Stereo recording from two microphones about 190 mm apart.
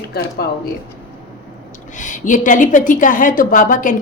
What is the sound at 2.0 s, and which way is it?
A woman's voice, 40° left (ahead or behind).